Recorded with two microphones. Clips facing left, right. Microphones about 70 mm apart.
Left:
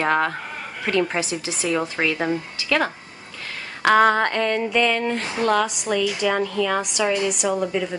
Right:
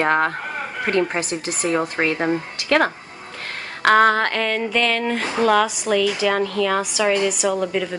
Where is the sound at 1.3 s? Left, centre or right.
Right.